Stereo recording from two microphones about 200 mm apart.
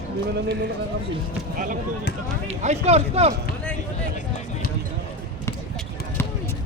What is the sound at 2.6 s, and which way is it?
Speech, 35° right (ahead or behind).